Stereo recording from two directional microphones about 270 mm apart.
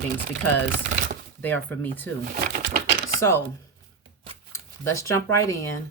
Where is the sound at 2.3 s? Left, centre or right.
Right.